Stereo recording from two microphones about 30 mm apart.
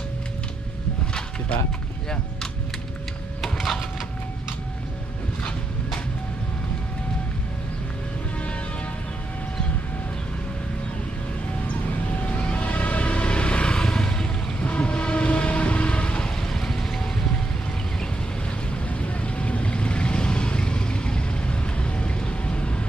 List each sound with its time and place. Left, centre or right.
12.3 s vehicle: left
14.6 s train: left
15.3 s music: left
16.5 s vehicle: centre
18.9 s vehicle: left